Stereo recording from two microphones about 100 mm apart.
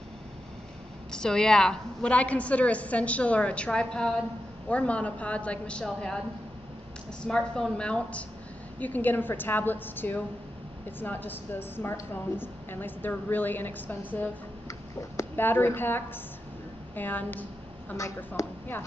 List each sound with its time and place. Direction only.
1.1 s a woman's voice: 5° left (ahead or behind)
7.2 s a woman's voice: 5° left (ahead or behind)
15.3 s a woman's voice: 20° left (ahead or behind)
17.9 s speech: 30° left (ahead or behind)